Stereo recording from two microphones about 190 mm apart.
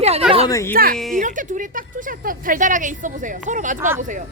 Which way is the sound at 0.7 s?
50° right (ahead or behind).